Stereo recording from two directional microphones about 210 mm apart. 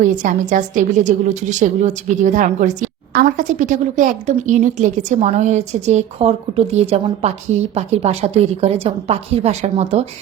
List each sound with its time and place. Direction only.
0.0 s a woman's voice: 40° right (ahead or behind)